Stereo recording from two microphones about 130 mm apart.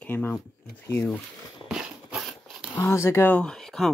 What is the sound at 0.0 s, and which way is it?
Speech, 15° left (ahead or behind).